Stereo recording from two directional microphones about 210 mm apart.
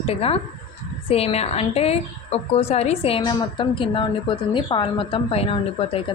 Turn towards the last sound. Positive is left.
turn(degrees=25)  # may be behind; listen again after turning